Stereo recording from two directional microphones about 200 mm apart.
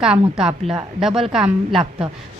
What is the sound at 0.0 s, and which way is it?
A woman's voice, 5° right (ahead or behind).